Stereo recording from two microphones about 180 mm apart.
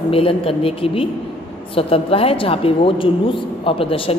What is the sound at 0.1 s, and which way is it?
A woman's voice, 30° left (ahead or behind).